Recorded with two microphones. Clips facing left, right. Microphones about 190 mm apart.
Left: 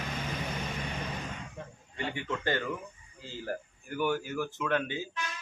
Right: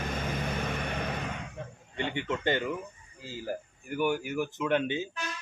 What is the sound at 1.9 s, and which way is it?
Speech, 20° right (ahead or behind).